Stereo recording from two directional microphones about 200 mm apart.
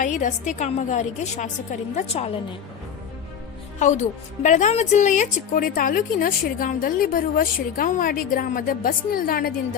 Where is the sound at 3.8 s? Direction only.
35° left (ahead or behind).